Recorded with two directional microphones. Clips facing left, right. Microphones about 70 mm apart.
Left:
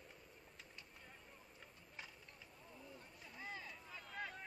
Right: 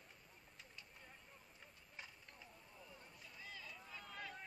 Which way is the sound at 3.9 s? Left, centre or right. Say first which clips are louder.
Even; centre.